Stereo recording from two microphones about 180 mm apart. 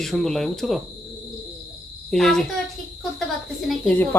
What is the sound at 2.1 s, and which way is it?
Speech, 5° left (ahead or behind).